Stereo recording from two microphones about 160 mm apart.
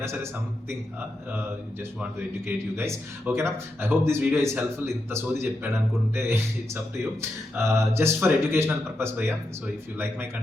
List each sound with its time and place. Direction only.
0.0 s speech: 15° right (ahead or behind)
2.0 s speech: 15° right (ahead or behind)